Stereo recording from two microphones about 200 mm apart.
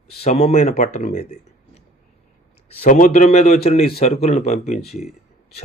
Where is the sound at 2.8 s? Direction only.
40° left (ahead or behind).